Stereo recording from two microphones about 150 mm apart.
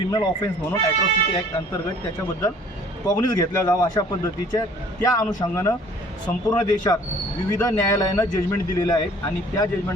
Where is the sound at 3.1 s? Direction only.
25° left (ahead or behind).